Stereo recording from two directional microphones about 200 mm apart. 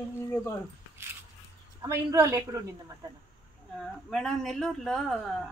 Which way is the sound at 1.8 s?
15° right (ahead or behind).